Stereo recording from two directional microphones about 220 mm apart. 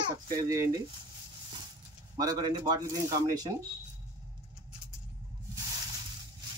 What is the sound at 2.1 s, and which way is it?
A man's voice, 20° right (ahead or behind).